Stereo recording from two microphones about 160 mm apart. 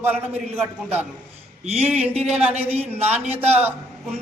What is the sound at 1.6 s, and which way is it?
Speech, 40° right (ahead or behind).